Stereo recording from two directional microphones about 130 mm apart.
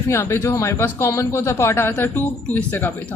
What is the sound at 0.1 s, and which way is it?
A woman's voice, 20° left (ahead or behind).